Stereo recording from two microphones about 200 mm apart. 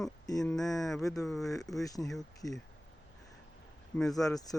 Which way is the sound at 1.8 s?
15° left (ahead or behind).